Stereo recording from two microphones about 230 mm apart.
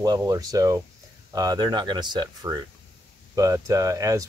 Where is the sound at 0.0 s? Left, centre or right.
Centre.